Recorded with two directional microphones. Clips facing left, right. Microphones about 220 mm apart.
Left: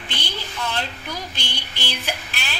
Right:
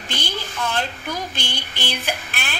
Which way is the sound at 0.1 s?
45° right (ahead or behind).